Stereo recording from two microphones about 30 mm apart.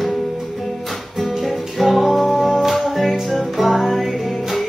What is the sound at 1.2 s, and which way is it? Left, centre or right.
Music, centre.